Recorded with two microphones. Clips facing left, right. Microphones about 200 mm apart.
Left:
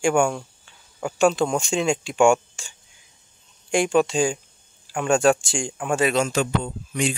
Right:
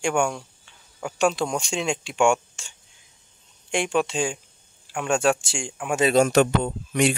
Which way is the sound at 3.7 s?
Centre (ahead or behind).